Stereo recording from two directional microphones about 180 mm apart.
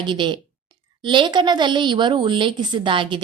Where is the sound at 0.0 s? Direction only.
25° right (ahead or behind).